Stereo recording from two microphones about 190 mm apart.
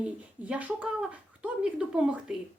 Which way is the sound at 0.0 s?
5° right (ahead or behind).